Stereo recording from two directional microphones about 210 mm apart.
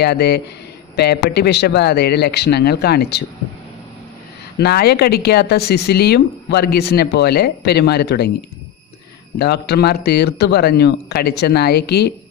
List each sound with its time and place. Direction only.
0.0 s speech: 50° left (ahead or behind)
4.6 s speech: 50° left (ahead or behind)
9.4 s speech: 50° left (ahead or behind)